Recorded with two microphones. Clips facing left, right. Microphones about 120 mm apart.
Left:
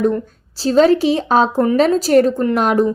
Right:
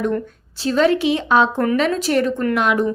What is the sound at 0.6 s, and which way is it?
A woman's voice, 35° left (ahead or behind).